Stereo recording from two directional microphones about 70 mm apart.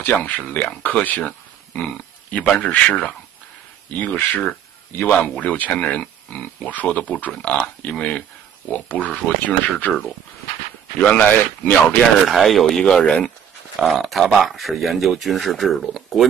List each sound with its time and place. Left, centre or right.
0.0 s speech: left
11.0 s speech: left
12.0 s speech: centre
13.7 s speech: centre